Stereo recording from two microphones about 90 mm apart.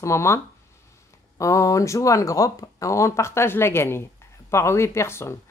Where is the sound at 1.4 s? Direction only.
35° left (ahead or behind).